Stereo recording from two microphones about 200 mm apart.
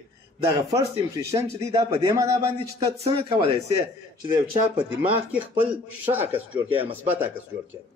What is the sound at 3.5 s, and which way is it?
Speech, 15° right (ahead or behind).